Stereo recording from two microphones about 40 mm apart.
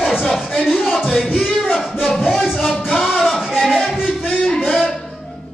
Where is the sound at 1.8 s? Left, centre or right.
Centre.